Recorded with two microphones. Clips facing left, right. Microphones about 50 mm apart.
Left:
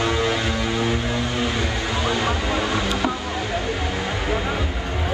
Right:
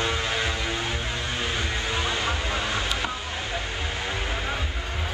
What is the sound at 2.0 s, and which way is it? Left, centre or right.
Music, left.